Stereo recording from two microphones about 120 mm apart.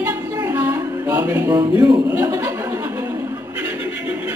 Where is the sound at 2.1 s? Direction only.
25° right (ahead or behind).